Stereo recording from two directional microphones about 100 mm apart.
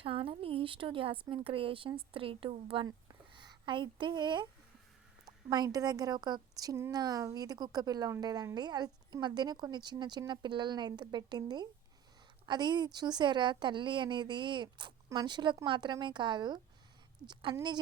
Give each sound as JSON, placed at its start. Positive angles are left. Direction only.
{"t": 0.0, "sound": "speech", "side_deg": -65}
{"t": 3.3, "sound": "a woman's voice", "side_deg": -50}